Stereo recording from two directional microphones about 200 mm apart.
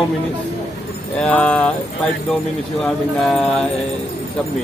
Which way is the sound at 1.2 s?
5° left (ahead or behind).